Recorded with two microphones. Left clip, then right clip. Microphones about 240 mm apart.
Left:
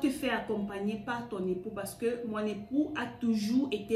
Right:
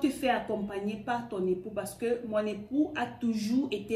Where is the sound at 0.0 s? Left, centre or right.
Centre.